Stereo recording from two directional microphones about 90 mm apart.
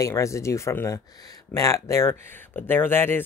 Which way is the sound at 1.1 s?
45° left (ahead or behind).